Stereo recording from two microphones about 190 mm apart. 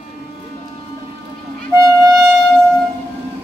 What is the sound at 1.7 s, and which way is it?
Music, 15° right (ahead or behind).